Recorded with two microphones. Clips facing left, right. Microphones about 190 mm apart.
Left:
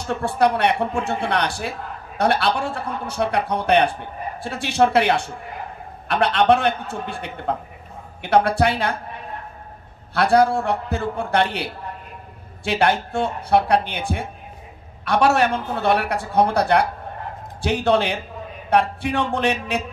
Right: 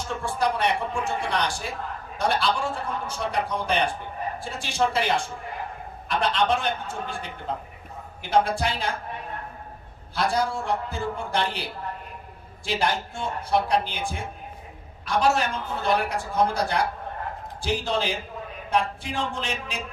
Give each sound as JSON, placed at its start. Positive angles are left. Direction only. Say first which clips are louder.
{"t": 0.1, "sound": "a man's voice", "louder": "left 7 dB", "side_deg": 65}
{"t": 10.1, "sound": "a man's voice", "louder": "left 8 dB", "side_deg": 65}